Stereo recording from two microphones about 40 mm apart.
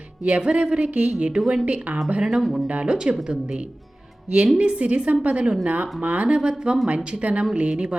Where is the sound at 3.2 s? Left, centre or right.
Right.